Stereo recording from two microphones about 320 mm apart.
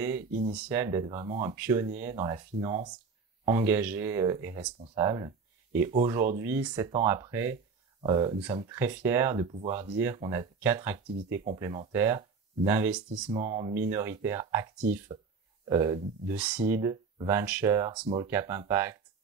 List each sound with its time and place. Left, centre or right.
0.3 s speech: right
0.7 s speech: centre
13.3 s speech: centre
15.7 s speech: centre